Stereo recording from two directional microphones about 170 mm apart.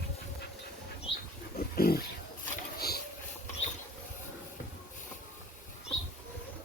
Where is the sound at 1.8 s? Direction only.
65° left (ahead or behind).